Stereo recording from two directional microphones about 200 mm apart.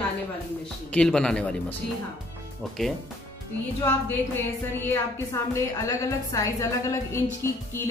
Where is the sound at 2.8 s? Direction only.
Centre (ahead or behind).